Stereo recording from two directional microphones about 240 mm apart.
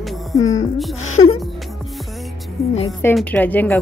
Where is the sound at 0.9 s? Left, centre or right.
Left.